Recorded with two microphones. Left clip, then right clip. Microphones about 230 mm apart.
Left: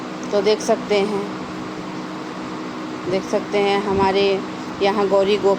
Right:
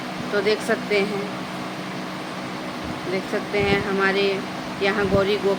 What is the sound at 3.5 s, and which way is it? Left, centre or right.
Speech, centre.